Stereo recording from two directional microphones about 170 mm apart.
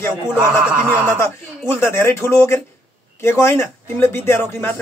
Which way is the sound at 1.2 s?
15° left (ahead or behind).